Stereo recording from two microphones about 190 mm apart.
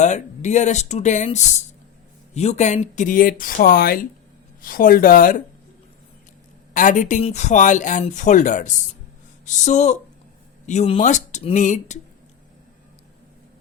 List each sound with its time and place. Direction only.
0.0 s speech: 40° left (ahead or behind)
6.7 s speech: 40° left (ahead or behind)